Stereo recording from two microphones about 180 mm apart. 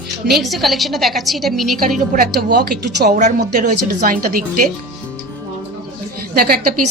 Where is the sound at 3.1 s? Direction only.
45° right (ahead or behind).